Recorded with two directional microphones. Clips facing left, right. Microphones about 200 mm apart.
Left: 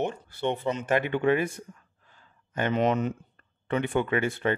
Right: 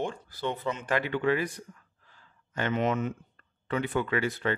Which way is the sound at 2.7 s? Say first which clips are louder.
Left 3 dB; 35° left (ahead or behind).